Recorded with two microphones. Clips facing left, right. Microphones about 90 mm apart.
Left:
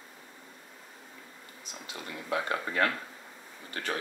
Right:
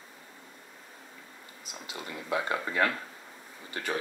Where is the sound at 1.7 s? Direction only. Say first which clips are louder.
Right 1 dB; 5° right (ahead or behind).